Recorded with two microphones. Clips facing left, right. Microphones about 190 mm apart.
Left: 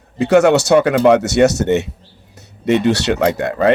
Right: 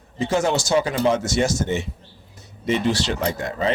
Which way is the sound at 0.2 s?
70° left (ahead or behind).